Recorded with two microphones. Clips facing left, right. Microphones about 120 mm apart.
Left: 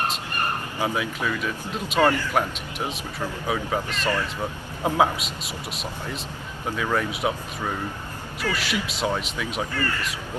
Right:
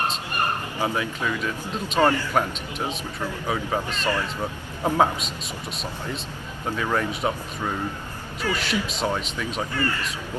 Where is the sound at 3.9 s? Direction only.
35° right (ahead or behind).